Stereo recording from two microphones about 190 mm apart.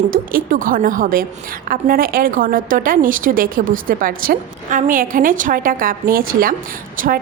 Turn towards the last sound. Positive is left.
turn(degrees=-45)  # may be behind; listen again after turning